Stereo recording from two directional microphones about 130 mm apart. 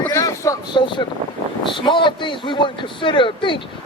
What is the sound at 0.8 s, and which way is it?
Speech, 40° left (ahead or behind).